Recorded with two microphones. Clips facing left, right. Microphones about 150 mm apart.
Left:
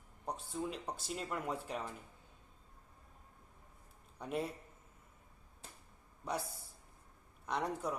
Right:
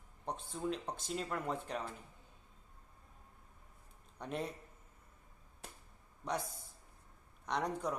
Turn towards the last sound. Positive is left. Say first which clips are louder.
# right 1 dB
turn(degrees=5)  # may be behind; listen again after turning